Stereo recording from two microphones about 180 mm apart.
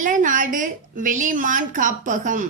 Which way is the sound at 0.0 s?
45° right (ahead or behind).